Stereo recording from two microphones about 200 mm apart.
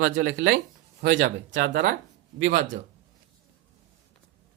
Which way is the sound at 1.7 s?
45° right (ahead or behind).